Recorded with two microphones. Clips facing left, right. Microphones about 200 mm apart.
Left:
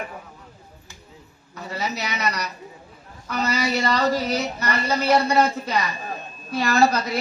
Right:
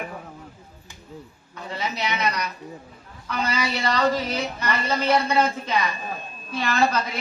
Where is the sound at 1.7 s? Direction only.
45° left (ahead or behind).